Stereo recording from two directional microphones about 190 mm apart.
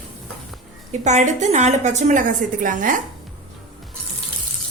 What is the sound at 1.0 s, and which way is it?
A woman's voice, 40° right (ahead or behind).